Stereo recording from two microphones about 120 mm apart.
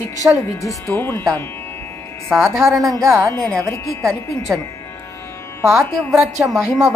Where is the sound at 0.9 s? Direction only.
20° left (ahead or behind).